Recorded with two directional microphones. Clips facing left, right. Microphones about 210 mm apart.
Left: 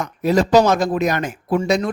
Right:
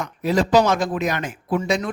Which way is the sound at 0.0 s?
40° left (ahead or behind).